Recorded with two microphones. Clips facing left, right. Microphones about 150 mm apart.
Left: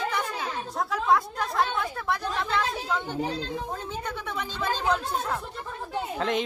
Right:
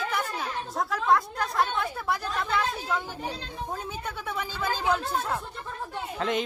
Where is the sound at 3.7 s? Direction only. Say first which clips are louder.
Left 1 dB; 5° right (ahead or behind).